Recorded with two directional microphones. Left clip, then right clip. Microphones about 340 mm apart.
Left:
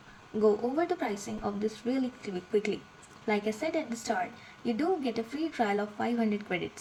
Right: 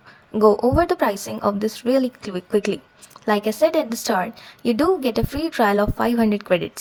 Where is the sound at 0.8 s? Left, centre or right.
Right.